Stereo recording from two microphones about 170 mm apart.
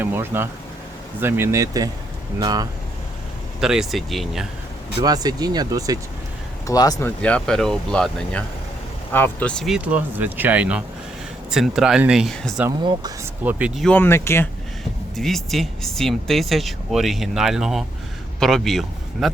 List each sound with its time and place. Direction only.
0.0 s speech: 15° right (ahead or behind)
3.6 s speech: 5° right (ahead or behind)
4.9 s speech: 25° right (ahead or behind)
6.7 s speech: 20° left (ahead or behind)
7.2 s speech: 5° left (ahead or behind)
13.4 s speech: 10° right (ahead or behind)
13.8 s speech: 10° left (ahead or behind)
15.1 s speech: centre (ahead or behind)